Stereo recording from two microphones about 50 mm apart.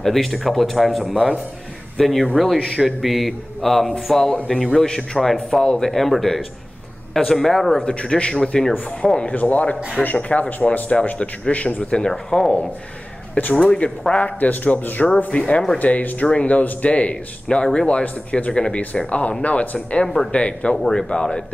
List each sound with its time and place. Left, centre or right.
0.0 s a man's voice: centre
7.8 s a man's voice: centre
9.3 s speech: left
12.0 s a man's voice: centre
13.4 s speech: left
13.8 s a man's voice: centre
14.2 s a man's voice: left
15.3 s speech: left
15.8 s a man's voice: left
18.0 s a man's voice: left
18.5 s speech: centre
20.7 s a man's voice: centre
21.1 s a man's voice: centre